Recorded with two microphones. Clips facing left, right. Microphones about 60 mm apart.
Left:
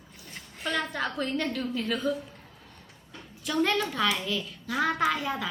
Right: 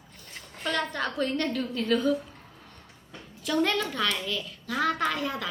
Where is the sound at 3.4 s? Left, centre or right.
Centre.